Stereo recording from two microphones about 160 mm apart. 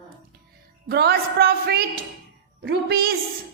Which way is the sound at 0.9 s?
80° right.